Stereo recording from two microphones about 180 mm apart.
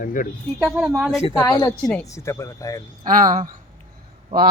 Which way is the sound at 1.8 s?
5° left (ahead or behind).